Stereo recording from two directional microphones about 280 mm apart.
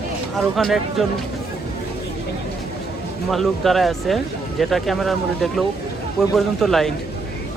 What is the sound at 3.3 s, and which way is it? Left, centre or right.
Speech, centre.